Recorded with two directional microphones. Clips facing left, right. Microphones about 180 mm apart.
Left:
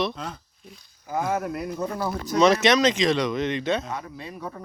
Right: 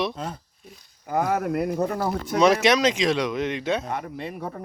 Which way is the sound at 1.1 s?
55° right (ahead or behind).